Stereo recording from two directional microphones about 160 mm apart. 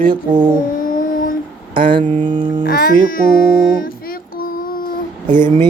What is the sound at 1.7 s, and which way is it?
Speech, 30° right (ahead or behind).